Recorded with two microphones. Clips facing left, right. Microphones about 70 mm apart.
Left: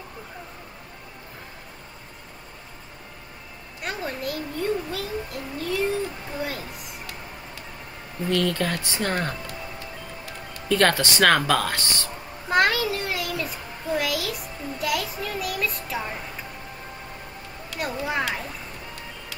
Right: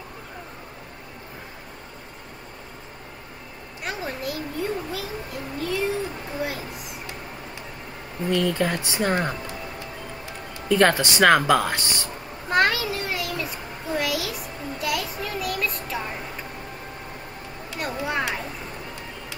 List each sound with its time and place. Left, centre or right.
3.8 s a child's voice: centre
8.3 s speech: centre
12.4 s a child's voice: centre
17.8 s a child's voice: centre